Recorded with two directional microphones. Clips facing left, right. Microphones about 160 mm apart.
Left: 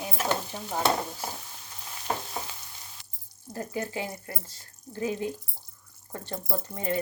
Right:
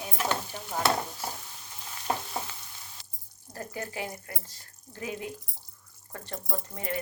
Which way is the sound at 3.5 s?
25° left (ahead or behind).